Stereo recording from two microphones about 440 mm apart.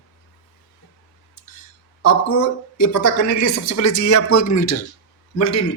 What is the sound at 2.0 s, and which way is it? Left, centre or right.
A woman's voice, left.